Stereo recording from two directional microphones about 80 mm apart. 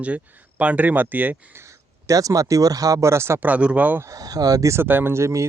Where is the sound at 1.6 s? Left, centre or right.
Right.